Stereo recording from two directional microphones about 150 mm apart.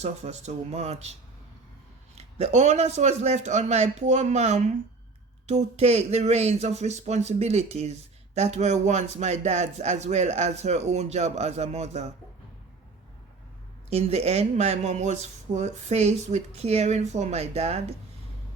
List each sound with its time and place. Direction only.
0.0 s speech: 50° right (ahead or behind)
2.1 s speech: 50° right (ahead or behind)
13.9 s speech: 45° right (ahead or behind)